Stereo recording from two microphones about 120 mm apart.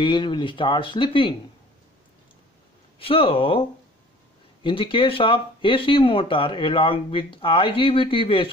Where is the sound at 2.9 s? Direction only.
50° left (ahead or behind).